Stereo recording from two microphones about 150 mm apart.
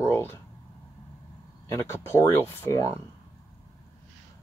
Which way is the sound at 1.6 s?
15° left (ahead or behind).